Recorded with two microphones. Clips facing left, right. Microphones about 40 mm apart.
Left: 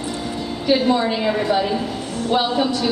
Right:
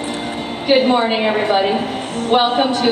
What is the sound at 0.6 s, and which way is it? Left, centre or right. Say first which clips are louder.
A woman's voice: right 4 dB; right.